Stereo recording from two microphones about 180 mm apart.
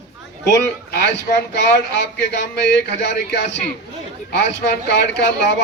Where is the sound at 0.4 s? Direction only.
65° left (ahead or behind).